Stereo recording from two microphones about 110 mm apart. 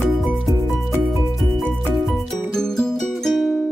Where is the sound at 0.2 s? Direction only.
5° right (ahead or behind).